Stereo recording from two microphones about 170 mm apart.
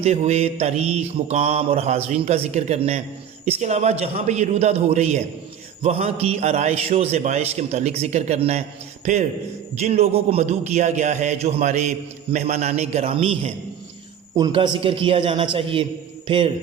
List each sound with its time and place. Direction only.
0.0 s speech: 40° right (ahead or behind)
9.7 s speech: 40° right (ahead or behind)
14.3 s speech: 25° right (ahead or behind)